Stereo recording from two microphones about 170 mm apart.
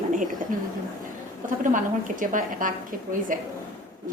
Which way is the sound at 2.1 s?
50° right (ahead or behind).